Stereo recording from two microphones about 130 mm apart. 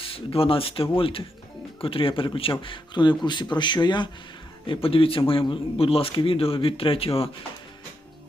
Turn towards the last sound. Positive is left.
turn(degrees=45)  # may be behind; listen again after turning